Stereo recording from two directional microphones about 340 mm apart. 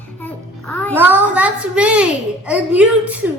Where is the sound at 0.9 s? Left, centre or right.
Centre.